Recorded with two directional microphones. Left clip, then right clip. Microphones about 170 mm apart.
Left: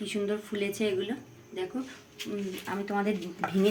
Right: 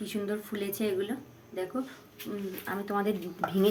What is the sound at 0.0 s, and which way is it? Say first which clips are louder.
Speech: left 3 dB; 10° right (ahead or behind).